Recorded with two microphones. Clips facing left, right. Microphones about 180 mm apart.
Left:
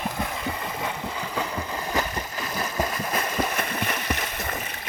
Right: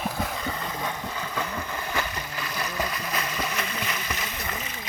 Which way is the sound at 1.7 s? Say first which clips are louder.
Left 3 dB; 35° left (ahead or behind).